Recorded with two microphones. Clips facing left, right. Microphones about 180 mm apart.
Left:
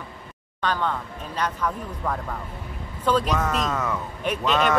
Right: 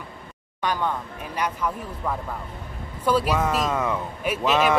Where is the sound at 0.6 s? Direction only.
10° right (ahead or behind).